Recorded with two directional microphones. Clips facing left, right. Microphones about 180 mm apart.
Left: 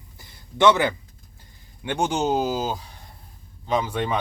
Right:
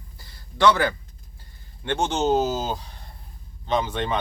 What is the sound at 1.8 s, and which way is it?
Speech, 10° left (ahead or behind).